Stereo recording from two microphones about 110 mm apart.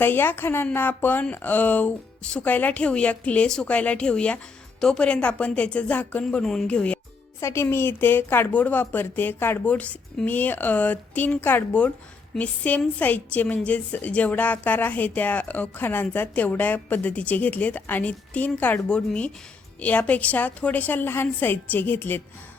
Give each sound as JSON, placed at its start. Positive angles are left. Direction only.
{"t": 0.0, "sound": "a woman's voice", "side_deg": 20}
{"t": 7.4, "sound": "a woman's voice", "side_deg": 25}